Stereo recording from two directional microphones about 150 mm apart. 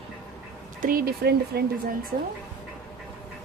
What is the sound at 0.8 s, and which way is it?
Speech, 75° right (ahead or behind).